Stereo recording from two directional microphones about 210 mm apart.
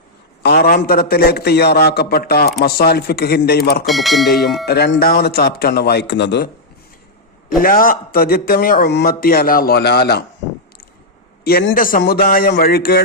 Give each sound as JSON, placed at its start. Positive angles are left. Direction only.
{"t": 0.4, "sound": "a man's voice", "side_deg": 50}
{"t": 3.8, "sound": "speech", "side_deg": 0}
{"t": 4.3, "sound": "a man's voice", "side_deg": 45}
{"t": 7.6, "sound": "a man's voice", "side_deg": 45}
{"t": 11.4, "sound": "a man's voice", "side_deg": 45}